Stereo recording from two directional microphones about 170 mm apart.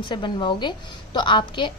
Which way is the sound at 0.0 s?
25° left (ahead or behind).